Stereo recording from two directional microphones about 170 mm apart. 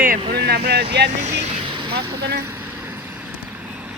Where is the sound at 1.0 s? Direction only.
80° right.